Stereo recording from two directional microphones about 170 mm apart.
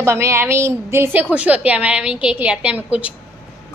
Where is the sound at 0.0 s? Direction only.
15° right (ahead or behind).